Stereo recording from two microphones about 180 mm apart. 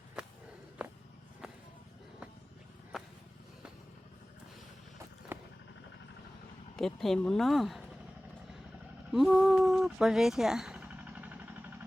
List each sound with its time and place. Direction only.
0.2 s walk: 5° right (ahead or behind)
2.9 s vehicle: 5° right (ahead or behind)
5.3 s vehicle: 10° right (ahead or behind)
6.7 s speech: centre (ahead or behind)
9.1 s a sound: centre (ahead or behind)